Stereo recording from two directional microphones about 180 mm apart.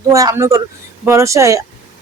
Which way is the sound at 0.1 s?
20° right (ahead or behind).